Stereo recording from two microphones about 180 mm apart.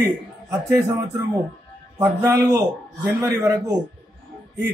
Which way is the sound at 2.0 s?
15° right (ahead or behind).